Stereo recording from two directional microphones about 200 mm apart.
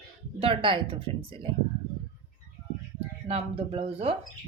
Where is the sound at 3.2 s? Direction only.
30° right (ahead or behind).